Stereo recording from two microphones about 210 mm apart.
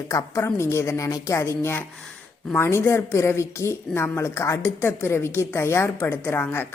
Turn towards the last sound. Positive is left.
turn(degrees=10)  # may be behind; listen again after turning